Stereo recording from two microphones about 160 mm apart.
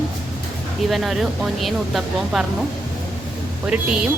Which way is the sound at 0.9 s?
Centre (ahead or behind).